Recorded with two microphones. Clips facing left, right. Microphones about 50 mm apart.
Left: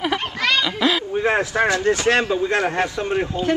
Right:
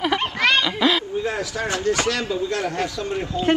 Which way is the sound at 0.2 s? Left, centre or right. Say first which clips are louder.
Right 1 dB; right.